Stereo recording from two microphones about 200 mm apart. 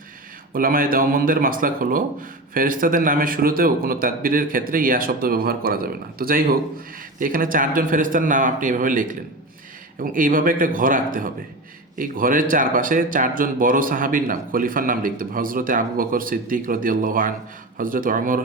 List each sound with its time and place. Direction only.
0.5 s speech: 45° right (ahead or behind)